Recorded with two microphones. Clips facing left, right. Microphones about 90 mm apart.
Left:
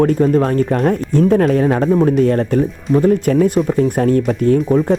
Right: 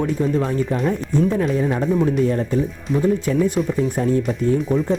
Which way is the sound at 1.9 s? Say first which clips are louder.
Left 4 dB; 50° left (ahead or behind).